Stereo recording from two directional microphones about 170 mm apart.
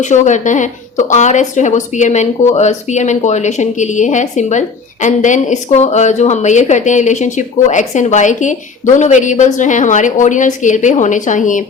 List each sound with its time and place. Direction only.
0.0 s a woman's voice: 45° left (ahead or behind)